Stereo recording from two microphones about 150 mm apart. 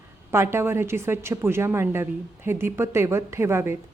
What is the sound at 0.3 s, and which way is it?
A woman's voice, 15° right (ahead or behind).